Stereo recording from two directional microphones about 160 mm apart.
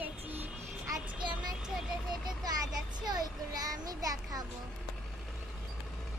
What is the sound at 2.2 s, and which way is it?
Child singing, 25° right (ahead or behind).